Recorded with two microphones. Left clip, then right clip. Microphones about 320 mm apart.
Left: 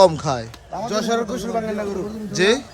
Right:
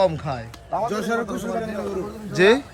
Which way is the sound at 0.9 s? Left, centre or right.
Left.